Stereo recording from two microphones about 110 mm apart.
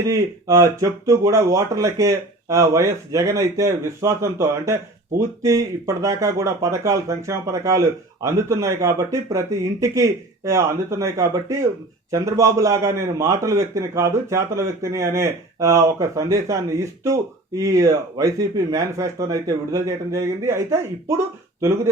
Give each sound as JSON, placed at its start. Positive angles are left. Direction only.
{"t": 0.0, "sound": "speech", "side_deg": -30}